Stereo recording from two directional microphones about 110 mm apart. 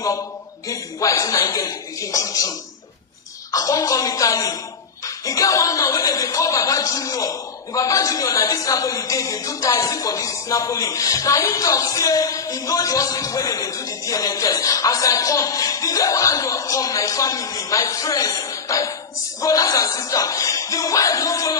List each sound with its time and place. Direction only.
0.7 s speech: 30° left (ahead or behind)